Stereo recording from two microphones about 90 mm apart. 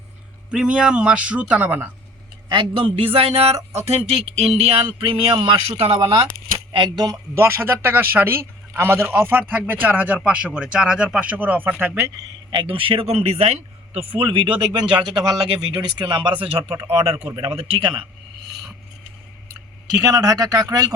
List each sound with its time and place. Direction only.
0.5 s speech: 10° right (ahead or behind)
2.5 s speech: 75° right (ahead or behind)
6.7 s speech: 60° right (ahead or behind)
7.3 s a man's voice: 30° right (ahead or behind)
12.5 s a man's voice: 75° right (ahead or behind)
20.0 s speech: 40° right (ahead or behind)